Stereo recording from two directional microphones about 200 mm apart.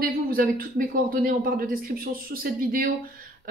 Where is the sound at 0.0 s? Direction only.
45° right (ahead or behind).